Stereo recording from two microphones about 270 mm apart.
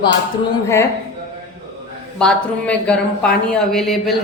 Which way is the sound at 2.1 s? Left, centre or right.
Centre.